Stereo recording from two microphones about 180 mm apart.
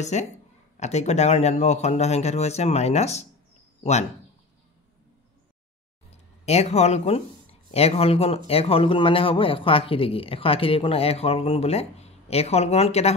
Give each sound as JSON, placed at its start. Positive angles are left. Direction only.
{"t": 0.0, "sound": "speech", "side_deg": 40}
{"t": 6.4, "sound": "speech", "side_deg": 35}